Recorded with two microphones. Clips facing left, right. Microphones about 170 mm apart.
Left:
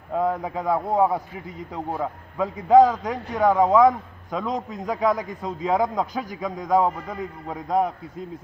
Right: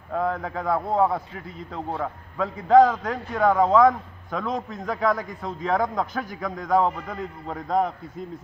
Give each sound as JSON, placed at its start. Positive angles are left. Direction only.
{"t": 0.1, "sound": "a man's voice", "side_deg": 15}